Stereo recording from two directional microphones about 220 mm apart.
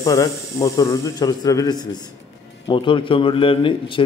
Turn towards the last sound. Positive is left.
turn(degrees=25)  # may be behind; listen again after turning